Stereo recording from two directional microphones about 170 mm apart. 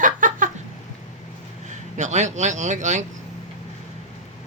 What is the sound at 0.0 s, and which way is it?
Chicken, 50° right (ahead or behind).